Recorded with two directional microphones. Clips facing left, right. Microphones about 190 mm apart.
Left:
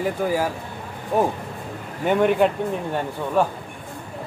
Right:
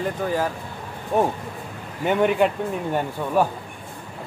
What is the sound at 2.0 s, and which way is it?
Speech, centre (ahead or behind).